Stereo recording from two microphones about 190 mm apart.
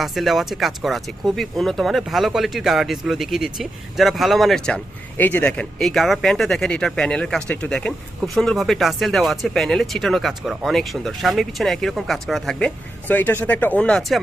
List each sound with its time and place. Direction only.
0.0 s speech: centre (ahead or behind)